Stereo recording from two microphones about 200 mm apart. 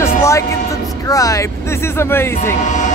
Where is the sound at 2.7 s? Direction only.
40° left (ahead or behind).